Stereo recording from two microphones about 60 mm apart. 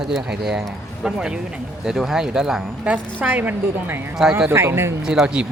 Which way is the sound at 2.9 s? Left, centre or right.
Right.